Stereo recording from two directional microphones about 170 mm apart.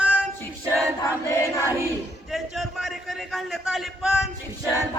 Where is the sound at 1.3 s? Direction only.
15° left (ahead or behind).